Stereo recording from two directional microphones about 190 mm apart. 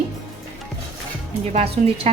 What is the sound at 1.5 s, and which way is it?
Speech, 30° right (ahead or behind).